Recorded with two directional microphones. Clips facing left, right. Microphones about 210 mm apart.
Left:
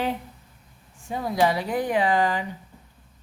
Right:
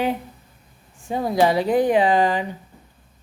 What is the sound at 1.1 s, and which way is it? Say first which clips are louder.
Speech: right 4 dB; 30° right (ahead or behind).